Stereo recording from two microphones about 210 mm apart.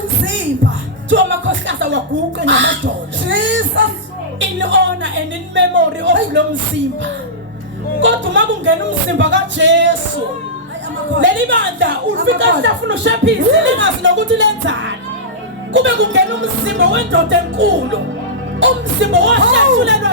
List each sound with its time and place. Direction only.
1.1 s music: 60° right (ahead or behind)
2.4 s a sound: 60° right (ahead or behind)
8.0 s music: 60° right (ahead or behind)
11.2 s music: 60° right (ahead or behind)